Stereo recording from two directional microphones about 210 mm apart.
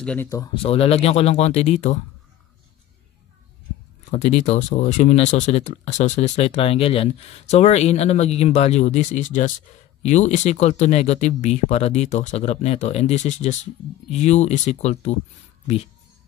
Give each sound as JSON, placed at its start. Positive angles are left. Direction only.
{"t": 0.0, "sound": "speech", "side_deg": 10}
{"t": 0.6, "sound": "speech", "side_deg": 30}
{"t": 4.1, "sound": "speech", "side_deg": 30}